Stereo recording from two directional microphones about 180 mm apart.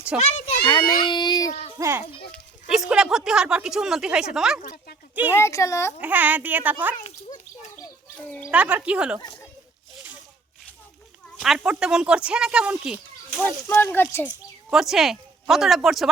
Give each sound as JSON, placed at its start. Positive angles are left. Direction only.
{"t": 0.2, "sound": "a child's voice", "side_deg": 40}
{"t": 0.7, "sound": "a child's voice", "side_deg": 25}
{"t": 1.8, "sound": "a woman's voice", "side_deg": -10}
{"t": 2.3, "sound": "speech", "side_deg": 0}
{"t": 4.6, "sound": "speech", "side_deg": 60}
{"t": 5.3, "sound": "a woman's voice", "side_deg": 15}
{"t": 6.0, "sound": "a woman's voice", "side_deg": -10}
{"t": 7.0, "sound": "a sound", "side_deg": 40}
{"t": 8.4, "sound": "a woman's voice", "side_deg": -5}
{"t": 11.3, "sound": "a child's voice", "side_deg": 0}
{"t": 13.7, "sound": "a woman's voice", "side_deg": 10}
{"t": 14.3, "sound": "speech", "side_deg": 0}